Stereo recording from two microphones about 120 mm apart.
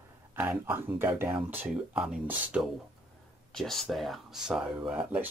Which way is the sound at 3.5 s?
5° left (ahead or behind).